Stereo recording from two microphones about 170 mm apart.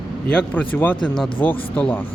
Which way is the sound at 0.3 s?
10° left (ahead or behind).